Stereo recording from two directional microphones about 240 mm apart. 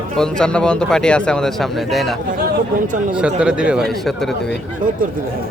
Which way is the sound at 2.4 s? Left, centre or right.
Right.